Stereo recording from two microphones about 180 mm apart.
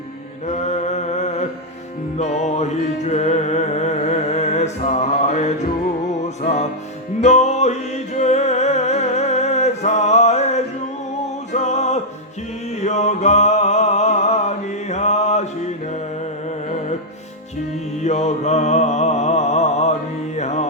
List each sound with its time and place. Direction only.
0.4 s mantra: 40° left (ahead or behind)
2.1 s music: 40° left (ahead or behind)
7.2 s music: 40° left (ahead or behind)
18.0 s music: 40° left (ahead or behind)